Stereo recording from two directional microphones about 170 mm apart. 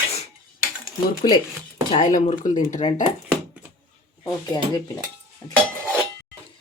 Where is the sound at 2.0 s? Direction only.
50° left (ahead or behind).